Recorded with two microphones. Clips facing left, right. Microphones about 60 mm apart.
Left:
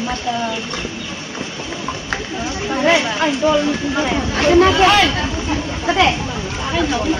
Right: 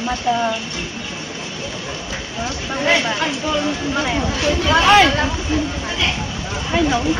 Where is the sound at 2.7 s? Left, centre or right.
Centre.